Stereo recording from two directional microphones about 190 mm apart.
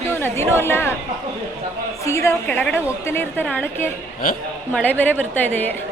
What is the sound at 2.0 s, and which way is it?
A woman's voice, 15° left (ahead or behind).